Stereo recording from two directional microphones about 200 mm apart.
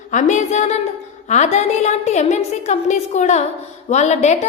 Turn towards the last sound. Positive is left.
turn(degrees=35)  # may be behind; listen again after turning